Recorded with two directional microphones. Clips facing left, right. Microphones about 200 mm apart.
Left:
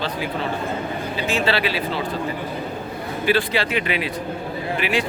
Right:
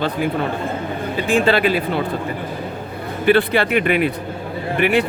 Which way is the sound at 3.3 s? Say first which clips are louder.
Right 6 dB; 55° right (ahead or behind).